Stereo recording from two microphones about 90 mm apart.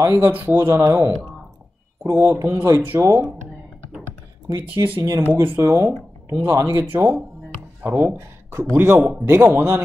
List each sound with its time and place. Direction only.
0.0 s speech: 25° right (ahead or behind)
4.5 s a man's voice: 30° right (ahead or behind)